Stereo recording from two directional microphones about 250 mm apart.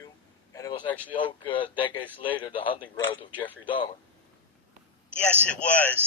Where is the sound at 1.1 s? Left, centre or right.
Centre.